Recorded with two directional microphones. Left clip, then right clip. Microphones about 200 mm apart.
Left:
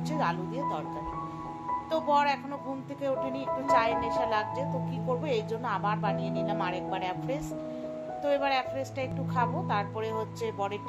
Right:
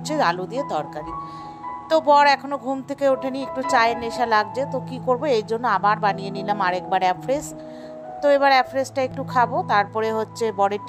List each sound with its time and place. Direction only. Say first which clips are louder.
0.1 s speech: right 10 dB; 45° right (ahead or behind)
1.9 s a woman's voice: right 12 dB; 45° right (ahead or behind)